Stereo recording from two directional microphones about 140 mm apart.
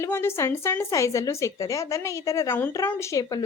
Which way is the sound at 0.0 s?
15° left (ahead or behind).